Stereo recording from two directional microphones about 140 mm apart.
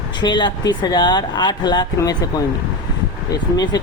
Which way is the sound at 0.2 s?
30° left (ahead or behind).